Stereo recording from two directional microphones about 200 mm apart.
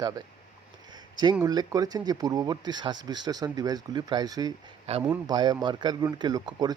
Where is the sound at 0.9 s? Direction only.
20° right (ahead or behind).